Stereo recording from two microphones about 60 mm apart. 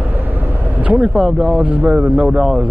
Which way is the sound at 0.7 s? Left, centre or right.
Right.